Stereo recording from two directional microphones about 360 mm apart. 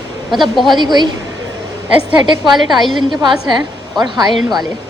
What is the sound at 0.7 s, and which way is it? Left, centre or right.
Speech, centre.